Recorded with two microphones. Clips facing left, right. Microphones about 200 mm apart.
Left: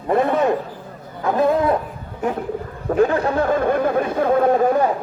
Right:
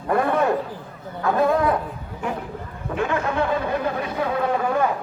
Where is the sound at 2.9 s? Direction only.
35° left (ahead or behind).